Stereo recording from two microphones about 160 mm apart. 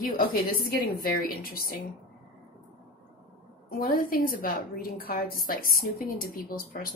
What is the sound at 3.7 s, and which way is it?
A woman's voice, 65° left (ahead or behind).